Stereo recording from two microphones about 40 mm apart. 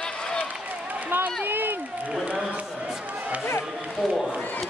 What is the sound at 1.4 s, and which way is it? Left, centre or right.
Speech, right.